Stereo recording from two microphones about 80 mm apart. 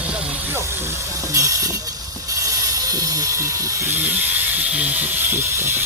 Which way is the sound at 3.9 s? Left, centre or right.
Right.